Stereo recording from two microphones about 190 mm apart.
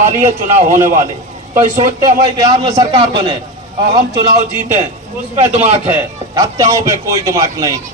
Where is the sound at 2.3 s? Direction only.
20° right (ahead or behind).